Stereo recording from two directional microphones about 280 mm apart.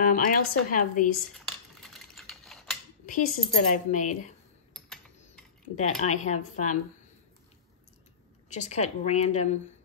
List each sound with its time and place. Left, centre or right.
0.0 s speech: left
1.3 s cutlery: centre
3.1 s speech: left
4.7 s typing: centre
5.8 s speech: left
8.5 s speech: left